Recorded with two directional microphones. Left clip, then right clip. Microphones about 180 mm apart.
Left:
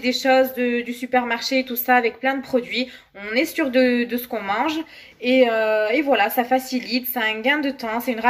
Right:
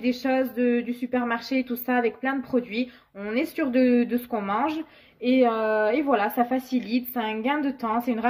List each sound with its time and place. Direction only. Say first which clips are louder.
0.0 s speech: left 8 dB; 45° right (ahead or behind)